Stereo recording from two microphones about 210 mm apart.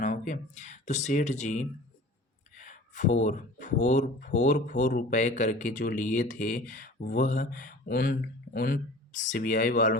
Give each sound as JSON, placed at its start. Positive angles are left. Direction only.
{"t": 0.0, "sound": "speech", "side_deg": 40}